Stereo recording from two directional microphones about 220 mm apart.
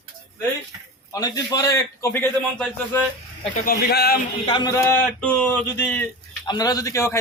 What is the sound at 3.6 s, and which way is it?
Speech, 45° left (ahead or behind).